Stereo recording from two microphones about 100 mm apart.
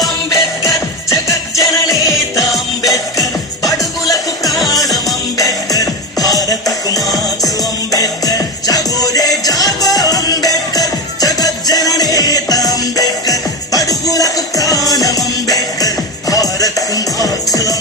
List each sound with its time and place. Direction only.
0.3 s music: 35° left (ahead or behind)
4.6 s music: 35° left (ahead or behind)